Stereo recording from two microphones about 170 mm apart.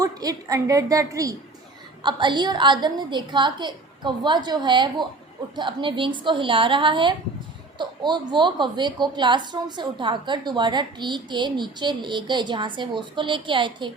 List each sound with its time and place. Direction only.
0.0 s a woman's voice: 20° right (ahead or behind)